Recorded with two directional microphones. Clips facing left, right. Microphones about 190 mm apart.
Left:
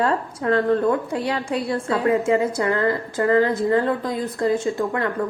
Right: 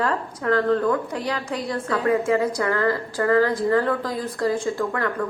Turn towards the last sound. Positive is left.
turn(degrees=20)  # may be behind; listen again after turning